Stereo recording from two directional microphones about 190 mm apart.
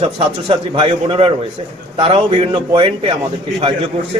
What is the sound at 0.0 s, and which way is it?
A man's voice, 30° right (ahead or behind).